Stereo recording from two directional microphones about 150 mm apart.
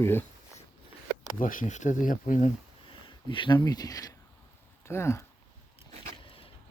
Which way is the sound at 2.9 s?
35° left (ahead or behind).